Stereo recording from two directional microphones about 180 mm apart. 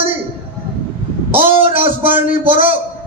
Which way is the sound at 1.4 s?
30° right (ahead or behind).